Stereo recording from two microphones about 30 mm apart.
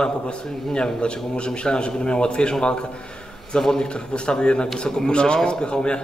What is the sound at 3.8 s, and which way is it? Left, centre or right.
A man's voice, left.